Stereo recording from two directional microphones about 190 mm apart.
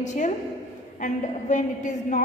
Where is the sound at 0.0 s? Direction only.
40° left (ahead or behind).